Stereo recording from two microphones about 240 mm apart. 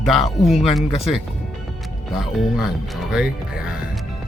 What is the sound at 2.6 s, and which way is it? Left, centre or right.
Speech, centre.